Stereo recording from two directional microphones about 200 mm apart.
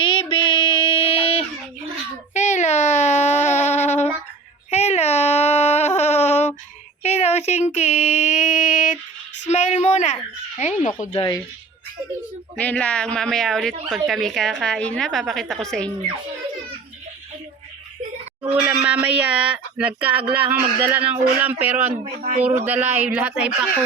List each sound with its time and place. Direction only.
0.0 s a sound: 25° left (ahead or behind)
10.6 s speech: 35° left (ahead or behind)
11.1 s speech: 20° left (ahead or behind)
12.5 s a woman's voice: 5° left (ahead or behind)
18.7 s speech: 5° right (ahead or behind)
22.0 s speech: 35° right (ahead or behind)
22.4 s speech: 10° right (ahead or behind)